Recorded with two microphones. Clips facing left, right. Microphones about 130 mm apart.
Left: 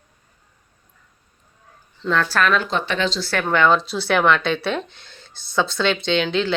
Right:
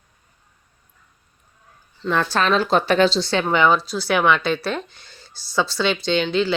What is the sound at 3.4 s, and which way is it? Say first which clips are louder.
Speech: left 2 dB; 10° right (ahead or behind).